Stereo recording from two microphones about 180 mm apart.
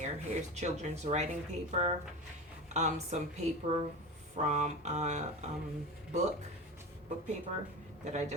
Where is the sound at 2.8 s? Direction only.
40° right (ahead or behind).